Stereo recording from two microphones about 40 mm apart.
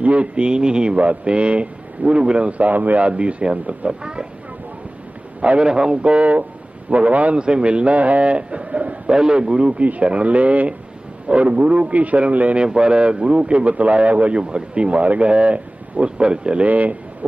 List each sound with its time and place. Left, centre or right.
0.0 s speech: right
0.9 s a man's voice: right
3.1 s a man's voice: right
5.4 s speech: right
6.9 s a man's voice: right
7.3 s a man's voice: right
9.1 s a man's voice: centre; by 12.5 s right
12.5 s a man's voice: right
16.6 s speech: right